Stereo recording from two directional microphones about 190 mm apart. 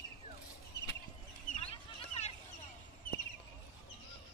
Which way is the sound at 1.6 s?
35° left (ahead or behind).